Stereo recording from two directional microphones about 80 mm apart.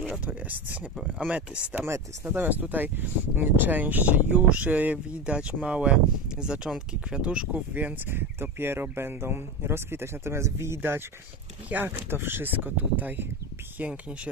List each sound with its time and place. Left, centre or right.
0.1 s speech: centre